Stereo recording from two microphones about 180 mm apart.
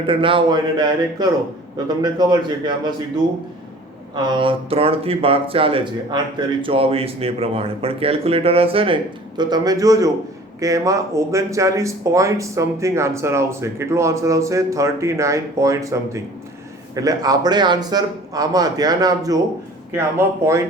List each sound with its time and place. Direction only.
0.1 s a man's voice: 30° right (ahead or behind)
4.1 s a man's voice: 25° right (ahead or behind)